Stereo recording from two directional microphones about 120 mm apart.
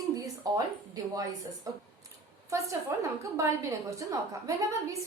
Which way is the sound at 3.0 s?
25° right (ahead or behind).